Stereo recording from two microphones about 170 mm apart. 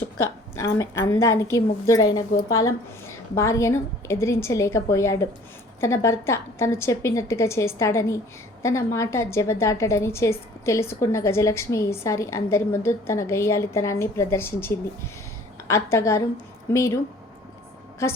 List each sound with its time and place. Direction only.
0.2 s a woman's voice: 15° left (ahead or behind)